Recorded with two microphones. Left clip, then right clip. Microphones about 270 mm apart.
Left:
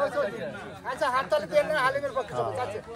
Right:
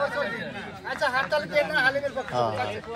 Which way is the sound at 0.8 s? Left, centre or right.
Left.